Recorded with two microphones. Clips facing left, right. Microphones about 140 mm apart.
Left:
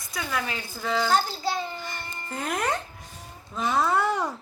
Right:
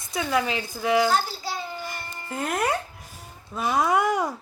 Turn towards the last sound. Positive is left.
turn(degrees=-10)  # may be behind; listen again after turning